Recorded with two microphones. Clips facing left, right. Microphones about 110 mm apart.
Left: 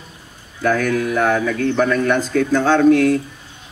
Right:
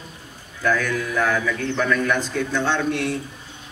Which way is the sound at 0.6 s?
50° left (ahead or behind).